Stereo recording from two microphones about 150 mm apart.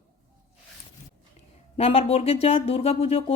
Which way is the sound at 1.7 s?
40° left (ahead or behind).